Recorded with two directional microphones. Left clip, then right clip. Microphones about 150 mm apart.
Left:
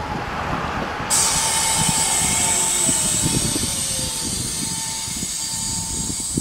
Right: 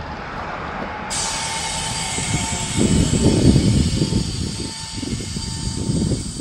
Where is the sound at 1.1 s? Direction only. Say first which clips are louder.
Left 4 dB; centre (ahead or behind).